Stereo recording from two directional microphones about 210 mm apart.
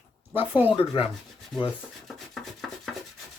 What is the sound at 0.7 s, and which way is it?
Speech, 25° left (ahead or behind).